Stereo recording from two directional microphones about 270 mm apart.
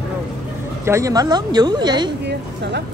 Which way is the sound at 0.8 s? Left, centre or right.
Centre.